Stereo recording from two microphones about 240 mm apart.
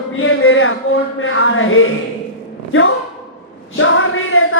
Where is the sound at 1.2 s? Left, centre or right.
Left.